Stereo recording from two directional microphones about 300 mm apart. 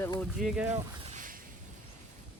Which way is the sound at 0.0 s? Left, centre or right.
Centre.